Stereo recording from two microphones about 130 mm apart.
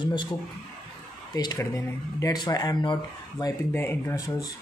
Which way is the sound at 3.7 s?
20° left (ahead or behind).